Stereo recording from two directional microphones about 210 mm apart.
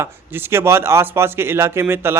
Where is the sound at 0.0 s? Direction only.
10° right (ahead or behind).